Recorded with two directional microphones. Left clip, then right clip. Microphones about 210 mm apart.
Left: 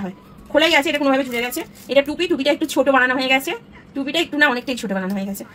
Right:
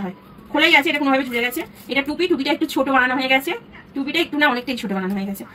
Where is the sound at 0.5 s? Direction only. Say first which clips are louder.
Even; 25° left (ahead or behind).